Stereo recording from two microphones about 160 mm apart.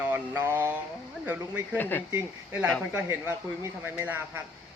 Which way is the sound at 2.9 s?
10° right (ahead or behind).